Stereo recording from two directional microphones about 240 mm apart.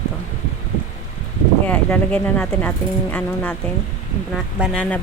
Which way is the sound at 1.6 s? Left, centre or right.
Centre.